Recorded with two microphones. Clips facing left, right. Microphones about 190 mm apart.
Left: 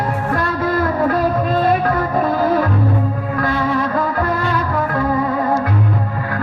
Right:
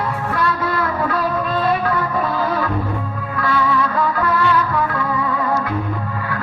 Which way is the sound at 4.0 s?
45° left (ahead or behind).